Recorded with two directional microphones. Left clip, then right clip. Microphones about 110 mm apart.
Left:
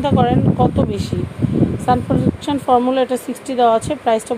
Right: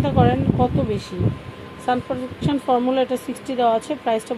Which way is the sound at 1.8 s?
40° left (ahead or behind).